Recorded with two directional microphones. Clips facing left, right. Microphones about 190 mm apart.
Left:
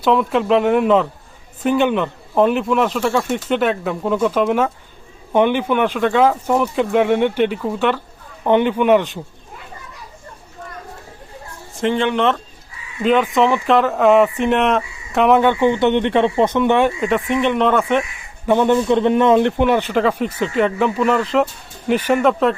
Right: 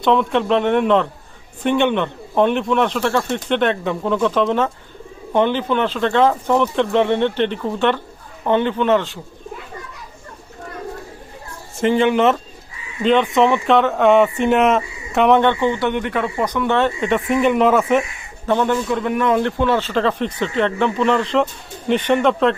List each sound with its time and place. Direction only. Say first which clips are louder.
0.0 s a man's voice: even; 5° left (ahead or behind)
11.8 s speech: right 2 dB; 5° right (ahead or behind)
15.6 s speech: left 4 dB; 20° left (ahead or behind)
17.0 s speech: right 1 dB; centre (ahead or behind)
18.4 s a man's voice: left 4 dB; 15° left (ahead or behind)